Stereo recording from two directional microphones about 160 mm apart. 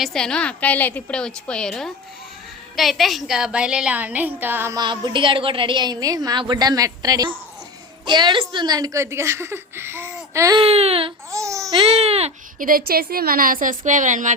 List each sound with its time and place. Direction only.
0.0 s a woman's voice: 5° left (ahead or behind); by 4.8 s 15° right (ahead or behind)
4.8 s a woman's voice: 30° right (ahead or behind)
10.6 s baby cry: 40° right (ahead or behind)
11.3 s a woman's voice: 20° right (ahead or behind)
11.8 s baby cry: 35° right (ahead or behind)
12.5 s a woman's voice: 60° right (ahead or behind)